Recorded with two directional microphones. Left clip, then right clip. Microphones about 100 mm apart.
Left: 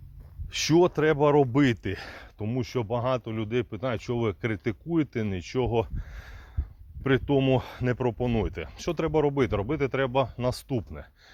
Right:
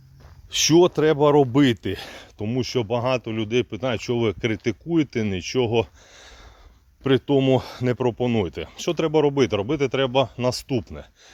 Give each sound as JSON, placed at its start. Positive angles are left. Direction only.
{"t": 0.5, "sound": "speech", "side_deg": -20}
{"t": 2.4, "sound": "speech", "side_deg": -35}
{"t": 7.0, "sound": "speech", "side_deg": -25}